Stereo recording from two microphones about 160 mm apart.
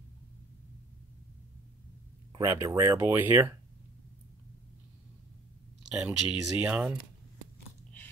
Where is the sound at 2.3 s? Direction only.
25° right (ahead or behind).